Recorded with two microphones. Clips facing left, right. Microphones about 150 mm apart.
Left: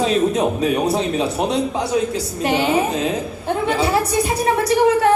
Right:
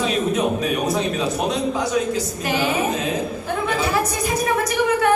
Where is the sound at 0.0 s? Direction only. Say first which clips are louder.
Left 3 dB; 30° left (ahead or behind).